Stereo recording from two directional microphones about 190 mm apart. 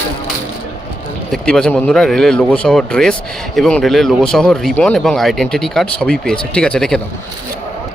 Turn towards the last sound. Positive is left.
turn(degrees=5)  # may be behind; listen again after turning